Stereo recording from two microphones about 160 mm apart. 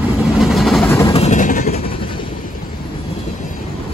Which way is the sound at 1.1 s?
45° left (ahead or behind).